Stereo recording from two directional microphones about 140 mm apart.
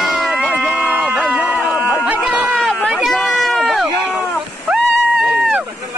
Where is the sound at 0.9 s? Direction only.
10° right (ahead or behind).